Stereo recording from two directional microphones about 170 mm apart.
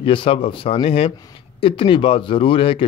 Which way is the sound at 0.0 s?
30° left (ahead or behind).